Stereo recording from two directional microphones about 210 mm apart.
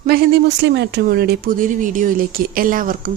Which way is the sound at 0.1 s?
50° right (ahead or behind).